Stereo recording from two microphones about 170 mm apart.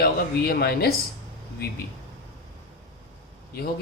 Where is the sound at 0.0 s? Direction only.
60° left (ahead or behind).